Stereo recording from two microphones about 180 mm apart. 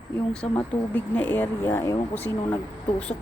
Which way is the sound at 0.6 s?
10° left (ahead or behind).